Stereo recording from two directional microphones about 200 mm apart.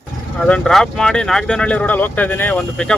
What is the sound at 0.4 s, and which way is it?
Speech, 5° left (ahead or behind).